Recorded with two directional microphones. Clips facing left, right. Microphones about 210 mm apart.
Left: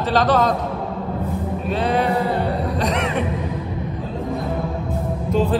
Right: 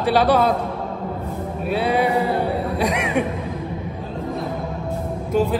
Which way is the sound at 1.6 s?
10° right (ahead or behind).